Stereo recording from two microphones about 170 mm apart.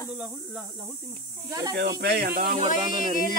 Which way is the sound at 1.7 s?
75° right (ahead or behind).